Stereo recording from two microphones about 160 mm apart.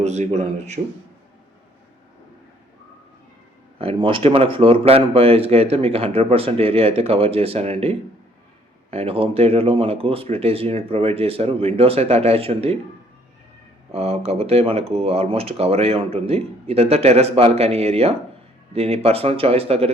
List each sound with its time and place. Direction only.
0.0 s speech: 45° right (ahead or behind)
3.8 s speech: 35° right (ahead or behind)
13.9 s speech: 40° right (ahead or behind)